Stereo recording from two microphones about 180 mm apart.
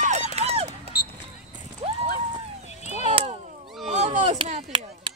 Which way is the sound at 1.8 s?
30° right (ahead or behind).